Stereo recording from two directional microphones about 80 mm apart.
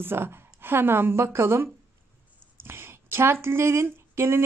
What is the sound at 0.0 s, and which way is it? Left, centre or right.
A woman's voice, right.